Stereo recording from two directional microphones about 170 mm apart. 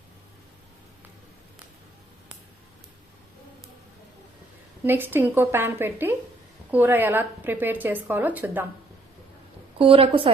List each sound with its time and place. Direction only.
4.9 s a woman's voice: 10° right (ahead or behind)
9.7 s a woman's voice: 30° right (ahead or behind)